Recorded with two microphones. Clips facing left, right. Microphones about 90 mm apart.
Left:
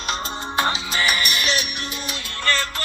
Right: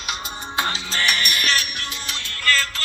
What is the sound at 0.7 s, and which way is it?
Music, 15° left (ahead or behind).